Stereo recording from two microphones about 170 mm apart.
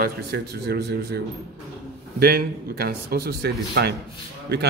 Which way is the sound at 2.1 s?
65° right (ahead or behind).